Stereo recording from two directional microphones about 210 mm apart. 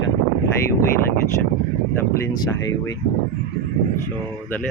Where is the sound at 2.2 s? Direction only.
15° left (ahead or behind).